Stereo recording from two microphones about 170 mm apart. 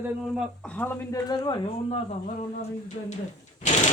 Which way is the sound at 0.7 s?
10° left (ahead or behind).